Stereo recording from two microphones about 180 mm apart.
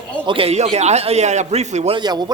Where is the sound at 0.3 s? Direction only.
30° right (ahead or behind).